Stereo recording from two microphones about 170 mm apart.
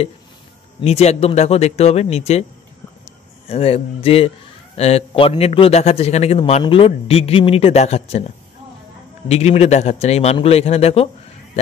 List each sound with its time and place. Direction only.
0.7 s a man's voice: 40° left (ahead or behind)
3.4 s a man's voice: 35° left (ahead or behind)
9.3 s a man's voice: 40° left (ahead or behind)